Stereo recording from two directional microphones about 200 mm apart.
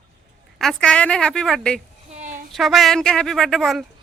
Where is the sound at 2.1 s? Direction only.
40° right (ahead or behind).